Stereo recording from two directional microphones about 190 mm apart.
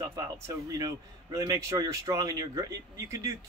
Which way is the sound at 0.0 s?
15° right (ahead or behind).